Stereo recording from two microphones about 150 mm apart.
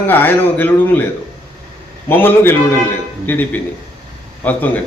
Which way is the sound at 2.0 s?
15° left (ahead or behind).